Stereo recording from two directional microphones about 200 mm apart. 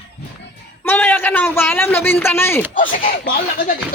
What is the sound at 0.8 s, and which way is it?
A man's voice, 10° left (ahead or behind).